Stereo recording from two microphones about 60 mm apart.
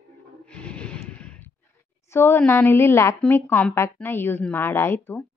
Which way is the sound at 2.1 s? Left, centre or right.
Left.